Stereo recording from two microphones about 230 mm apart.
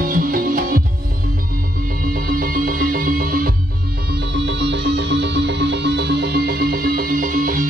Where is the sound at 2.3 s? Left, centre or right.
Right.